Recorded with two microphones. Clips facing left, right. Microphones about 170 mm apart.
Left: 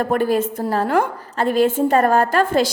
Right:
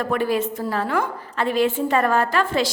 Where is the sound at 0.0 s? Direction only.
45° left (ahead or behind).